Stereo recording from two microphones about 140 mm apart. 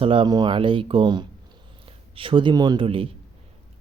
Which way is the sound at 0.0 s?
40° right (ahead or behind).